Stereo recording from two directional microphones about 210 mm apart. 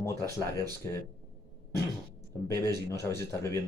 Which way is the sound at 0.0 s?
15° left (ahead or behind).